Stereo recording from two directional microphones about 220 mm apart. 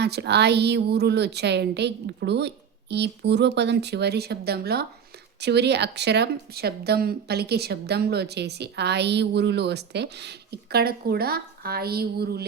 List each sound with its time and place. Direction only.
0.0 s a woman's voice: 50° right (ahead or behind)